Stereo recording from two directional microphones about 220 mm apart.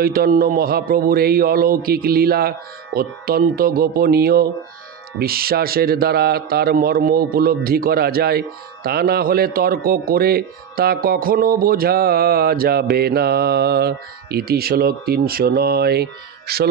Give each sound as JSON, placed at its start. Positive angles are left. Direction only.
{"t": 0.0, "sound": "a man's voice", "side_deg": -40}